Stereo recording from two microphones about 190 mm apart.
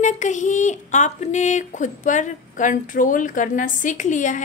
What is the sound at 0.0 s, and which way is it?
A woman's voice, 40° left (ahead or behind).